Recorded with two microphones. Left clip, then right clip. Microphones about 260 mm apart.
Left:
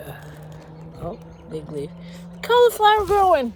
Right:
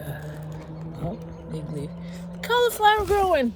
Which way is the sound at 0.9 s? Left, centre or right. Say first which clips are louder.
Left 2 dB; left.